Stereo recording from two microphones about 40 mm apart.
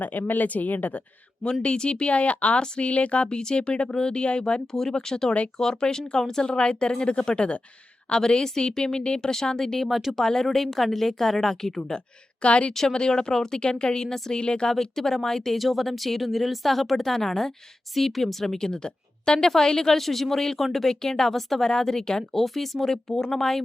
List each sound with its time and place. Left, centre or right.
0.0 s speech: left
1.6 s speech: left
2.6 s speech: left
4.6 s a woman's voice: centre
12.4 s speech: left
12.9 s speech: centre
14.7 s a woman's voice: centre
15.5 s a woman's voice: centre
22.3 s a woman's voice: centre